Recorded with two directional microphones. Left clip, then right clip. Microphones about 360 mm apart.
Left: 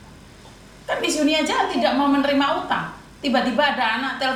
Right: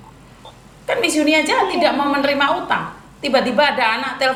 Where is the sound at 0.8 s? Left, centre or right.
Right.